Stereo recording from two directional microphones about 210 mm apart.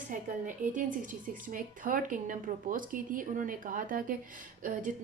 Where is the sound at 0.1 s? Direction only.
40° right (ahead or behind).